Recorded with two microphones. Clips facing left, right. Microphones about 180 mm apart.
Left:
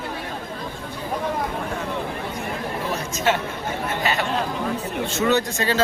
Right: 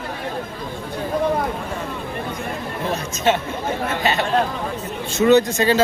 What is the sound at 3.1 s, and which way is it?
Speech, 20° right (ahead or behind).